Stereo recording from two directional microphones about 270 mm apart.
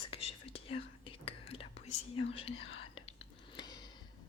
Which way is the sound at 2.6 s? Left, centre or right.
Left.